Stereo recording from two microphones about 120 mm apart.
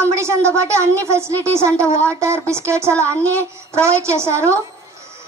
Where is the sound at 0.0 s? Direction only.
25° right (ahead or behind).